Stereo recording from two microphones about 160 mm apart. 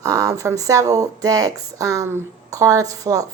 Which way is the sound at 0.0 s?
20° right (ahead or behind).